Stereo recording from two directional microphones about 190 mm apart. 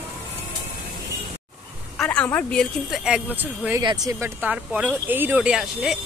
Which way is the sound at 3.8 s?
20° right (ahead or behind).